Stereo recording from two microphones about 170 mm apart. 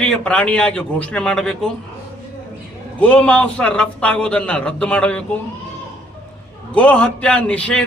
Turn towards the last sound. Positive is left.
turn(degrees=5)  # may be behind; listen again after turning